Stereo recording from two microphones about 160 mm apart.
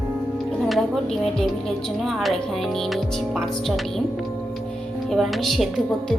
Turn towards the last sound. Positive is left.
turn(degrees=0)  # may be behind; listen again after turning